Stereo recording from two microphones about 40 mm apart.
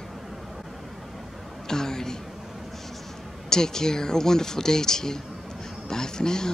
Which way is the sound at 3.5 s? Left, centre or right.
Centre.